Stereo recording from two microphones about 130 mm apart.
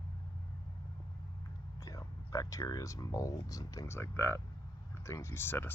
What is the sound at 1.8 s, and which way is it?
Speech, 25° left (ahead or behind).